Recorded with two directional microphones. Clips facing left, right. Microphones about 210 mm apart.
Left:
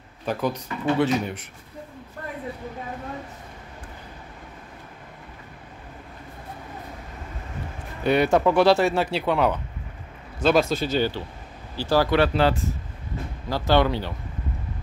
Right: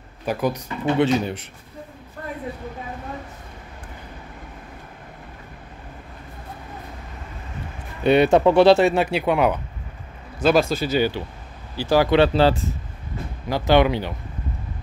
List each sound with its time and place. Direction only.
0.2 s speech: 10° right (ahead or behind)
8.0 s speech: 25° right (ahead or behind)
10.4 s speech: centre (ahead or behind); by 12.5 s 30° right (ahead or behind)
13.5 s speech: 15° right (ahead or behind)